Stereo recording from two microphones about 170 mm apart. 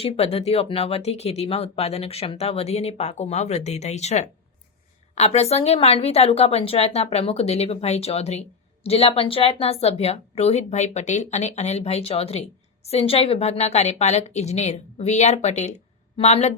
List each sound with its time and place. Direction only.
0.0 s a woman's voice: 35° left (ahead or behind)